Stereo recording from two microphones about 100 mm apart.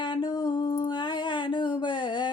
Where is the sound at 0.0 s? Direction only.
50° left (ahead or behind).